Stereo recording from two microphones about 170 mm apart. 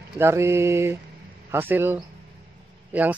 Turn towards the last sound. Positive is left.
turn(degrees=-10)  # may be behind; listen again after turning